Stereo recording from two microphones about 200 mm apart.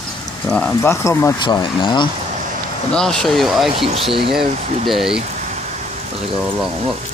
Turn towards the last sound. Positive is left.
turn(degrees=0)  # may be behind; listen again after turning